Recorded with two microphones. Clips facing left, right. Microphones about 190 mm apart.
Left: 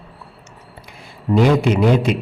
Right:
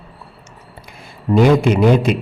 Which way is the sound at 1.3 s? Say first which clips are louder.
Right 2 dB; 50° right (ahead or behind).